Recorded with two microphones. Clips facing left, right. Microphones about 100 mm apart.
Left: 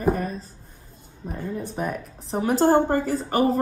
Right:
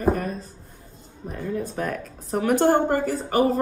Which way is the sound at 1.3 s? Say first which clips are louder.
Right 2 dB; 20° left (ahead or behind).